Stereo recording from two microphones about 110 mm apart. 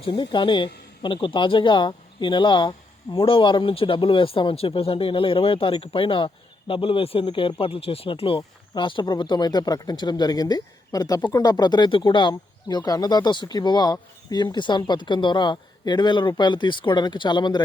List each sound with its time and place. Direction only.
0.0 s speech: 45° left (ahead or behind)